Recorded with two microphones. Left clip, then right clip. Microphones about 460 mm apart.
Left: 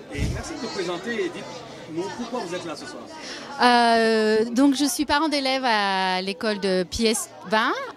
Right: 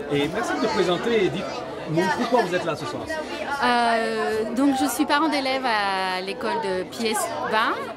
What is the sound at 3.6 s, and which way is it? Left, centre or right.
A woman's voice, left.